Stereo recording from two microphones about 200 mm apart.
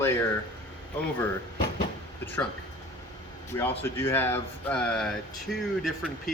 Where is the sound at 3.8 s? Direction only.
10° left (ahead or behind).